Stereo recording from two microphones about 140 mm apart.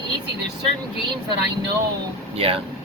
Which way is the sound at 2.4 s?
40° right (ahead or behind).